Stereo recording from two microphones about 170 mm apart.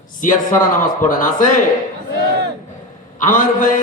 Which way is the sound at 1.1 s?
50° left (ahead or behind).